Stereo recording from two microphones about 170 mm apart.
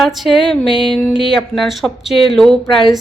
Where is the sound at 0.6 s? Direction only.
30° left (ahead or behind).